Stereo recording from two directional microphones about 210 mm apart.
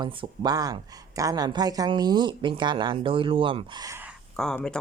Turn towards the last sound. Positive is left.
turn(degrees=5)  # may be behind; listen again after turning